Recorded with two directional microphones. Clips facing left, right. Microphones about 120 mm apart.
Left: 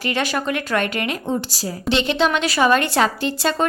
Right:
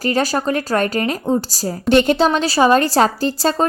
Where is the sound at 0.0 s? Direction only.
40° right (ahead or behind).